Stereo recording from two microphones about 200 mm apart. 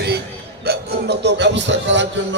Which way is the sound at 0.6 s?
55° right (ahead or behind).